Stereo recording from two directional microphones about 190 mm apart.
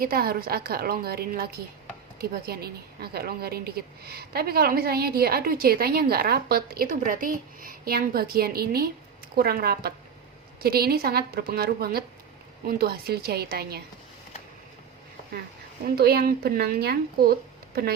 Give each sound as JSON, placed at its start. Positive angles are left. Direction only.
{"t": 0.0, "sound": "a woman's voice", "side_deg": -50}
{"t": 16.0, "sound": "speech", "side_deg": -55}